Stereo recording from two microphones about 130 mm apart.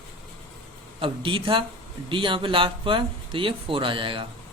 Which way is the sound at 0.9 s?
40° right (ahead or behind).